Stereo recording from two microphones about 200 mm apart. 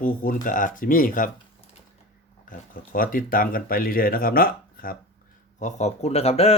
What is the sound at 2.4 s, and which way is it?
Speech, 45° left (ahead or behind).